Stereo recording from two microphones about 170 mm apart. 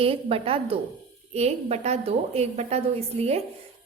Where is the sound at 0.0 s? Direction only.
35° right (ahead or behind).